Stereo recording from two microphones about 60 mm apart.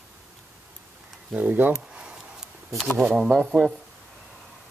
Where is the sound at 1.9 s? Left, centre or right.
Centre.